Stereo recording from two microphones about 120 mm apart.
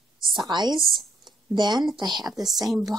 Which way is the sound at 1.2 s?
40° right (ahead or behind).